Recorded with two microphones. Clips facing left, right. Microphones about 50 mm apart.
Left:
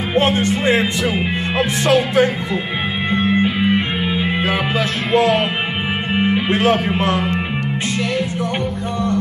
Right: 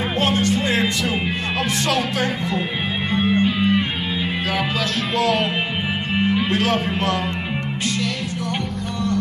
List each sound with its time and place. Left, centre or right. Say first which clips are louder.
0.1 s music: left 5 dB; left
3.3 s music: left 2 dB; left
5.1 s music: left 6 dB; left
6.1 s speech: left 2 dB; left